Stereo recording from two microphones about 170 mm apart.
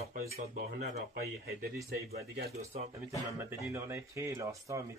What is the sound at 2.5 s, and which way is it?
Speech, 40° right (ahead or behind).